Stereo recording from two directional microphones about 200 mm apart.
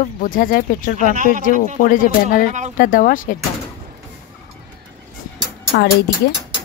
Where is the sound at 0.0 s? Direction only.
45° left (ahead or behind).